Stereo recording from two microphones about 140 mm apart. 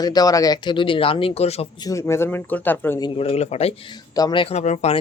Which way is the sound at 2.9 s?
30° left (ahead or behind).